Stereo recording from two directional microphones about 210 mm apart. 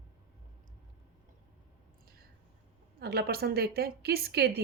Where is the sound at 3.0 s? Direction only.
50° right (ahead or behind).